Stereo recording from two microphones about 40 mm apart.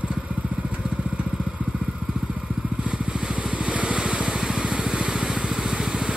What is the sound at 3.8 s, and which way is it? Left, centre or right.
Vehicle, right.